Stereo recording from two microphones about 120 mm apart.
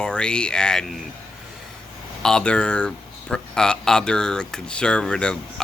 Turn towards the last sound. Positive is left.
turn(degrees=5)  # may be behind; listen again after turning